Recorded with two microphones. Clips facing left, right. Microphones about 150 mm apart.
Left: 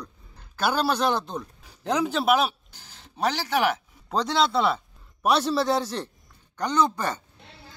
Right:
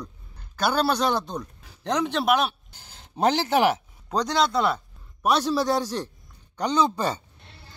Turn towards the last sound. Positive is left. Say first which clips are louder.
# right 1 dB
turn(degrees=-10)  # may be behind; listen again after turning